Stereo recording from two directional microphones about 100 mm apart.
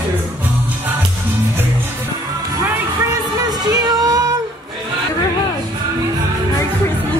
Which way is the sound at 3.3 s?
40° right (ahead or behind).